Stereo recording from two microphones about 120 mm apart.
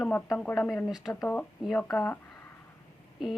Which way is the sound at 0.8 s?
5° right (ahead or behind).